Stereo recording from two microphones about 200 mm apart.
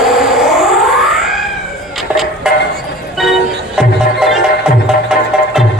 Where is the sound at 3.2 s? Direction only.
Centre (ahead or behind).